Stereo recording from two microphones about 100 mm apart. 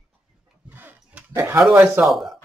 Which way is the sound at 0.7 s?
20° right (ahead or behind).